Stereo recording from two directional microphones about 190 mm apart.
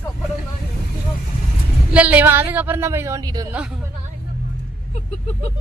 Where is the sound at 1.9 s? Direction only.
5° right (ahead or behind).